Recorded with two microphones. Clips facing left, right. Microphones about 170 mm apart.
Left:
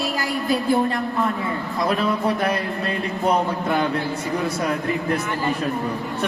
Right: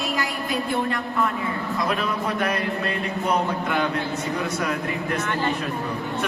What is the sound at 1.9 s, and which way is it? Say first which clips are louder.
Speech: left 7 dB; 30° left (ahead or behind).